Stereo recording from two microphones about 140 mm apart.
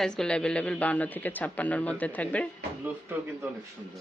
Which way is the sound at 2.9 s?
15° right (ahead or behind).